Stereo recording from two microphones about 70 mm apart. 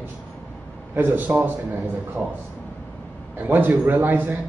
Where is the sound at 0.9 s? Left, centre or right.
Right.